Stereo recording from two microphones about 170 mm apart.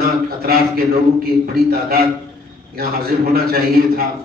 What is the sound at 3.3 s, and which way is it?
Speech, 60° right (ahead or behind).